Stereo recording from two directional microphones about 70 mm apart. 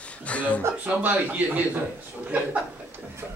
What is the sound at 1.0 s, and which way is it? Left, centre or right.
A man's voice, right.